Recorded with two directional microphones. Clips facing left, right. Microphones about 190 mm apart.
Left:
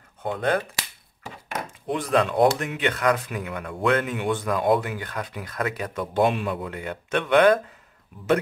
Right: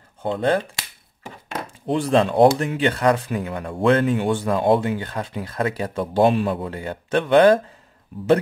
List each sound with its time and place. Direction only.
0.2 s speech: 30° right (ahead or behind)
1.9 s speech: 30° right (ahead or behind)